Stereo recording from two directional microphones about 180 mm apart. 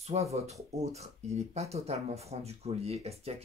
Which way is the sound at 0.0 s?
35° right (ahead or behind).